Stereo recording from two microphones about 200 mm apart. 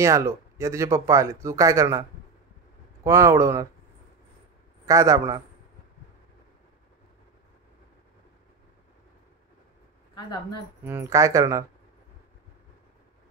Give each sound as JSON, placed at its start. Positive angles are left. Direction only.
{"t": 0.0, "sound": "speech", "side_deg": -15}
{"t": 4.8, "sound": "speech", "side_deg": -15}
{"t": 10.8, "sound": "speech", "side_deg": -10}